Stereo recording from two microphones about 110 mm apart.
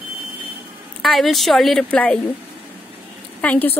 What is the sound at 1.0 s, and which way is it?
A woman's voice, centre (ahead or behind).